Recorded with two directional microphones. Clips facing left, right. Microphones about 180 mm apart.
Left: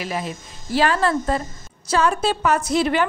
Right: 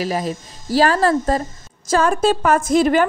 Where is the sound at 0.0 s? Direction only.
40° right (ahead or behind).